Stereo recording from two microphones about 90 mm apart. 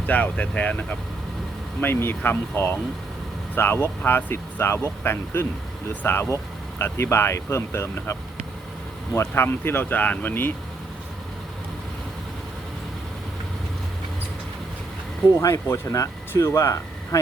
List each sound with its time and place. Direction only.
0.0 s speech: 15° left (ahead or behind)
9.1 s speech: 30° left (ahead or behind)
15.4 s speech: 35° left (ahead or behind)